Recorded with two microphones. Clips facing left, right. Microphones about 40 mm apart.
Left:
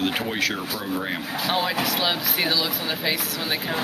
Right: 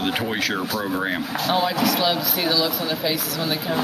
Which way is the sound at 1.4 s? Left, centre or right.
Centre.